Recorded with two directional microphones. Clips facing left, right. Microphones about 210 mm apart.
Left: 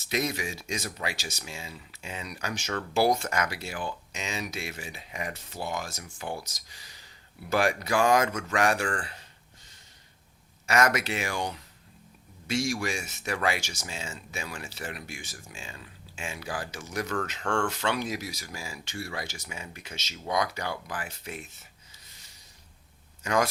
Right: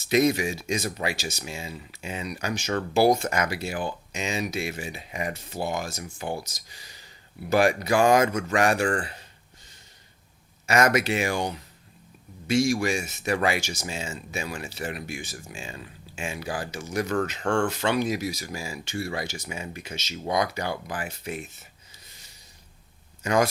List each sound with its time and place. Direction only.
0.1 s speech: 15° right (ahead or behind)
0.8 s speech: 30° right (ahead or behind)
1.0 s speech: 15° right (ahead or behind)
7.5 s speech: 10° right (ahead or behind)
10.7 s speech: 15° right (ahead or behind)
12.7 s speech: 15° right (ahead or behind)
23.2 s speech: 15° right (ahead or behind)